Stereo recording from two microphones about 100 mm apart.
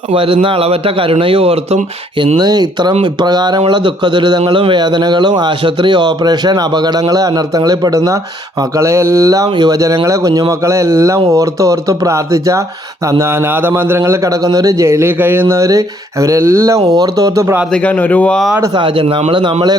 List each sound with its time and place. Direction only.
0.1 s a man's voice: 65° right (ahead or behind); by 17.6 s 30° right (ahead or behind)
17.7 s a man's voice: 15° left (ahead or behind)
18.7 s a man's voice: 60° right (ahead or behind)